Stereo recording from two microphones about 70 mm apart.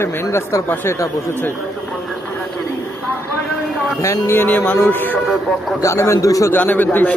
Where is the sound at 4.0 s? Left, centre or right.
Left.